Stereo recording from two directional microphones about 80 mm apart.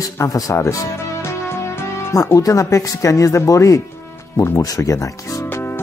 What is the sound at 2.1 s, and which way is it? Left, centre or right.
Speech, left.